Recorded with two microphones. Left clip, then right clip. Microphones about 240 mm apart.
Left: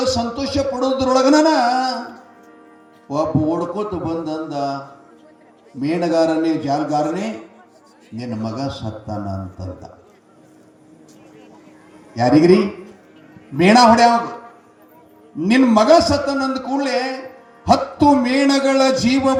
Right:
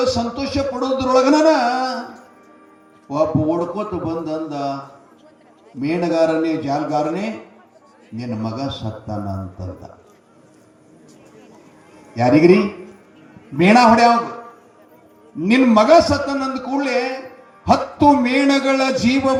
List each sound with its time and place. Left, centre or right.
0.0 s speech: left
3.1 s speech: left
5.8 s speech: left
12.1 s speech: left
13.6 s speech: left
15.4 s speech: left